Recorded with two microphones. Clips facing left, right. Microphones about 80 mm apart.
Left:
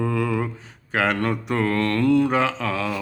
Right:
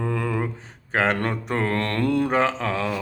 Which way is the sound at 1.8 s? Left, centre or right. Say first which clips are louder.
Left 4 dB; right.